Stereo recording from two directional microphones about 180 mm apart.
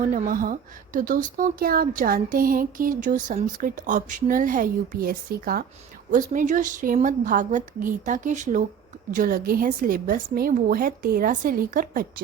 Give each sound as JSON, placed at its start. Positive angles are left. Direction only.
{"t": 0.1, "sound": "speech", "side_deg": -50}